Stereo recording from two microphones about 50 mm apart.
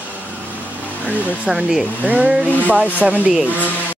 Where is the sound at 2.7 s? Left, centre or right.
Right.